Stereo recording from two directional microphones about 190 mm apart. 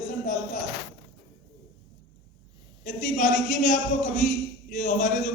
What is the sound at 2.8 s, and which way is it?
A man's voice, 40° left (ahead or behind).